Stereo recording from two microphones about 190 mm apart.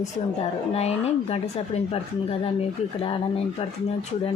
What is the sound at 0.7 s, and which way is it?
Speech, 35° left (ahead or behind).